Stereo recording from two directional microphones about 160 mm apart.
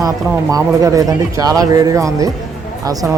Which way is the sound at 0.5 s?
20° right (ahead or behind).